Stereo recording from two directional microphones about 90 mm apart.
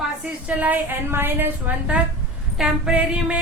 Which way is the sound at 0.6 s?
20° right (ahead or behind).